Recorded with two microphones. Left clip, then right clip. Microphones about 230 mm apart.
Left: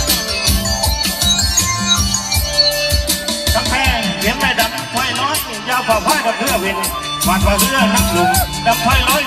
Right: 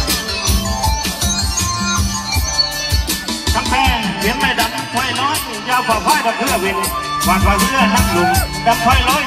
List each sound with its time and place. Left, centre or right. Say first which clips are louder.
1.2 s music: left 7 dB; left
3.5 s music: right 2 dB; left